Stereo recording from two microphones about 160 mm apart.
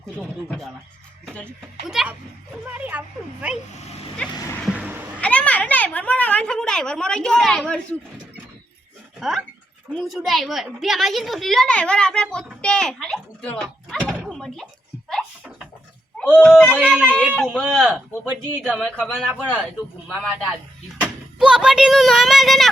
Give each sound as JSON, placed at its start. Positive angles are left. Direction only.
{"t": 1.2, "sound": "a woman's voice", "side_deg": 5}
{"t": 4.4, "sound": "speech", "side_deg": 20}
{"t": 4.6, "sound": "a sound", "side_deg": -10}
{"t": 5.2, "sound": "a woman's voice", "side_deg": 10}
{"t": 9.2, "sound": "a woman's voice", "side_deg": 0}
{"t": 14.0, "sound": "door", "side_deg": -10}
{"t": 14.3, "sound": "thunk", "side_deg": 5}
{"t": 15.1, "sound": "a sound", "side_deg": 5}
{"t": 16.1, "sound": "a woman's voice", "side_deg": 10}
{"t": 16.7, "sound": "speech", "side_deg": -10}
{"t": 17.3, "sound": "a woman's voice", "side_deg": 5}
{"t": 20.3, "sound": "a woman's voice", "side_deg": -5}